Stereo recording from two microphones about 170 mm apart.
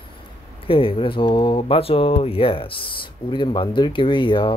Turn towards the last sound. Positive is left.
turn(degrees=30)  # may be behind; listen again after turning